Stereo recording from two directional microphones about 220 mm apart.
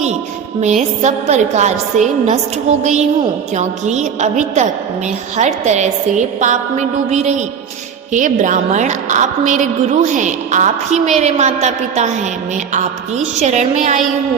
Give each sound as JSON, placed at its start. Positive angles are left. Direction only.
{"t": 0.6, "sound": "a woman's voice", "side_deg": -30}